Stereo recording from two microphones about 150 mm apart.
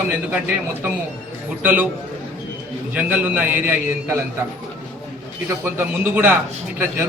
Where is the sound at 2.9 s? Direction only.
10° right (ahead or behind).